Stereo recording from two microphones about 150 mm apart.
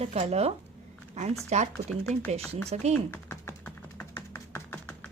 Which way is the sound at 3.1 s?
15° left (ahead or behind).